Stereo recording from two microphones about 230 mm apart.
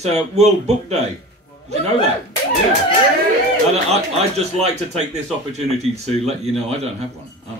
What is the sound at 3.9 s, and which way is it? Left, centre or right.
Speech, right.